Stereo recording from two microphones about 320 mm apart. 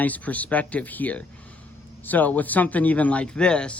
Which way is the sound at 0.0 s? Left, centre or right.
Centre.